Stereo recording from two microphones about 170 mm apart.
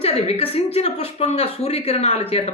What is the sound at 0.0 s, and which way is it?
Speech, 35° left (ahead or behind).